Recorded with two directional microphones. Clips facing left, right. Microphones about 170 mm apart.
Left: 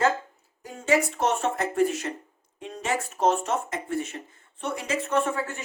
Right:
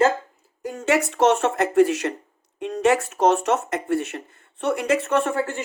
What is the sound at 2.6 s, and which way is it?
Speech, 70° right (ahead or behind).